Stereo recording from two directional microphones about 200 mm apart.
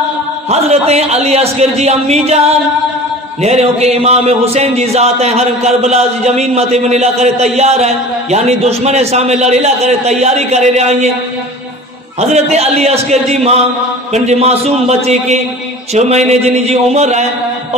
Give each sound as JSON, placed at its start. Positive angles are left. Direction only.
{"t": 0.5, "sound": "speech", "side_deg": -30}
{"t": 12.2, "sound": "speech", "side_deg": -35}